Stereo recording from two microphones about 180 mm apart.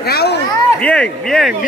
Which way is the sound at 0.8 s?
5° left (ahead or behind).